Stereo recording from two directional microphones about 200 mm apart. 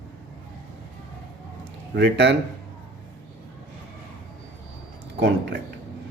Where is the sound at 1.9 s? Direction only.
60° right (ahead or behind).